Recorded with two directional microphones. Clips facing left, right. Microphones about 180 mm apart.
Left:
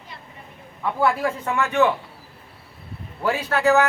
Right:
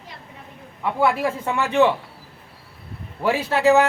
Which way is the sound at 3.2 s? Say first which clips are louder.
Right 2 dB; 25° right (ahead or behind).